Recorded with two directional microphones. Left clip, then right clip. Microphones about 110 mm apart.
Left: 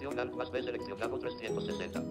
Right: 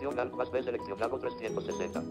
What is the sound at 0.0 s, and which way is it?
Speech, 20° right (ahead or behind).